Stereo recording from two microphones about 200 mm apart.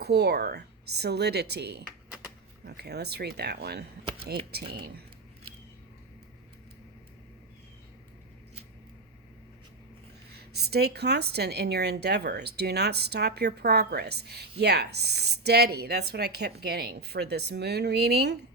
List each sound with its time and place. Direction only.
0.0 s speech: 55° right (ahead or behind)
10.3 s speech: 55° right (ahead or behind)